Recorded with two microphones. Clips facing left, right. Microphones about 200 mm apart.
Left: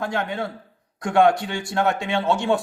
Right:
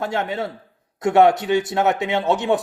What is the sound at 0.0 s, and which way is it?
A man's voice, 25° right (ahead or behind).